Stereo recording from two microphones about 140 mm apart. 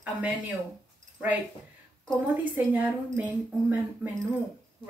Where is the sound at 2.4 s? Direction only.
10° right (ahead or behind).